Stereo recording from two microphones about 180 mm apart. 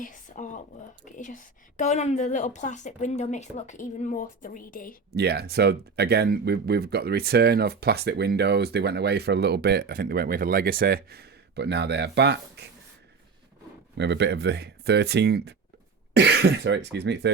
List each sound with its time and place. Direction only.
0.0 s a woman's voice: 45° left (ahead or behind)
5.1 s speech: 65° right (ahead or behind)
13.9 s speech: 75° right (ahead or behind)